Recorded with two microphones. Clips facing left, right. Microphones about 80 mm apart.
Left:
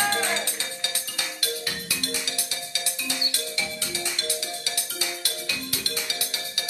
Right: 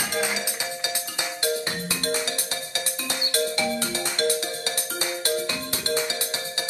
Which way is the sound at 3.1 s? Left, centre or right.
Right.